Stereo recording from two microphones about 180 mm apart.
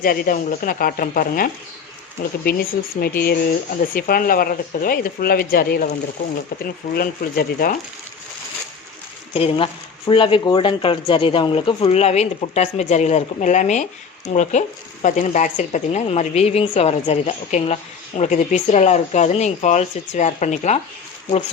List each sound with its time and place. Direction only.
0.0 s speech: 50° left (ahead or behind)
9.3 s speech: 30° left (ahead or behind)